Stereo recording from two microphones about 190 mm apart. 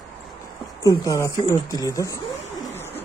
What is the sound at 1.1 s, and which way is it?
Speech, 15° left (ahead or behind).